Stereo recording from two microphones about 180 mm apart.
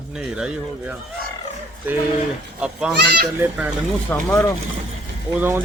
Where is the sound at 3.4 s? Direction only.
10° right (ahead or behind).